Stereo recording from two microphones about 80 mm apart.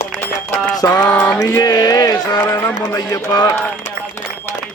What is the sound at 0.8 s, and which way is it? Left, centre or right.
Speech, left.